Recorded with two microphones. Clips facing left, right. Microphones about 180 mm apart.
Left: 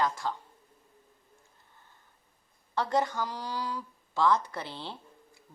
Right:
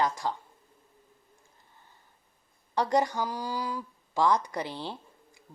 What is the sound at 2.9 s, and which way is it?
Speech, 15° right (ahead or behind).